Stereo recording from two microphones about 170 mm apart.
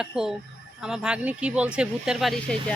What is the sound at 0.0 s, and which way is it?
Speech, 5° right (ahead or behind).